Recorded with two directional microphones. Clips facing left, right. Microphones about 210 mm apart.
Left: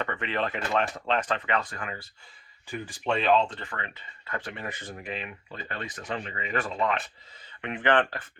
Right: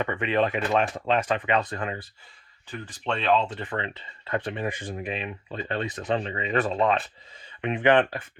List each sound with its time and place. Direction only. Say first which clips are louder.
0.0 s speech: right 6 dB; 15° right (ahead or behind)
1.7 s speech: right 6 dB; 30° right (ahead or behind)
2.6 s speech: left 1 dB; 10° left (ahead or behind)
3.6 s speech: right 7 dB; 20° right (ahead or behind)